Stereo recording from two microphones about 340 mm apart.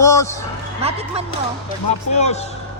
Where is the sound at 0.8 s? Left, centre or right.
Centre.